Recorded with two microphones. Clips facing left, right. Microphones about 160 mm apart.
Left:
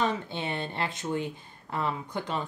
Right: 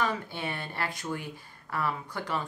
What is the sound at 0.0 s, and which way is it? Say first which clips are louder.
Speech: left 2 dB; 20° left (ahead or behind).